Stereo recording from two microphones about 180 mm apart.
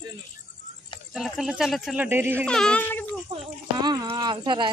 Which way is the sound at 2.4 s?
5° left (ahead or behind).